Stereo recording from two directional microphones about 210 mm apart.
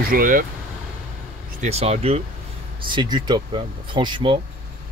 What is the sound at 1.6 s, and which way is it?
Speech, 30° right (ahead or behind).